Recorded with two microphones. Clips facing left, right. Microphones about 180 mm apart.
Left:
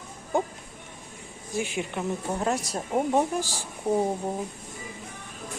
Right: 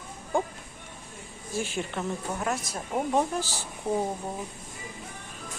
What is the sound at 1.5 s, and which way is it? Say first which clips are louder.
Speech: left 2 dB; 15° left (ahead or behind).